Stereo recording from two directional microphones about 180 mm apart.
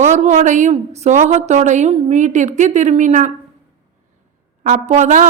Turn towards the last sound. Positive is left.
turn(degrees=-45)  # may be behind; listen again after turning